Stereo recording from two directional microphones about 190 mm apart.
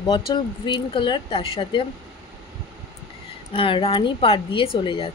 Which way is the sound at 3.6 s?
30° left (ahead or behind).